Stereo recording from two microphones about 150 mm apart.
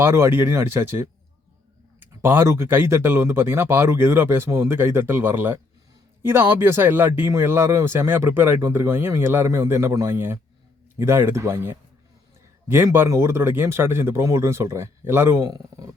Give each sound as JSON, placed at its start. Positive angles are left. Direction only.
{"t": 0.0, "sound": "speech", "side_deg": -15}